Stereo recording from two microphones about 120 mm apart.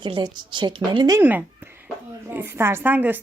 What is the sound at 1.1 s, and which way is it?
A woman's voice, 15° right (ahead or behind).